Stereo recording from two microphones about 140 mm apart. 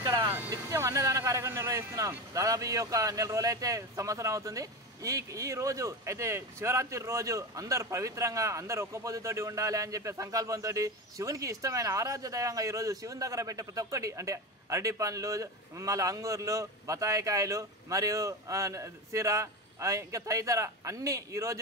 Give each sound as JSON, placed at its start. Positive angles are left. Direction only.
{"t": 0.0, "sound": "speech", "side_deg": -20}